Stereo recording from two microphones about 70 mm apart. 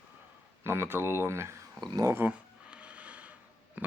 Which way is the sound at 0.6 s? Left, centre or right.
Right.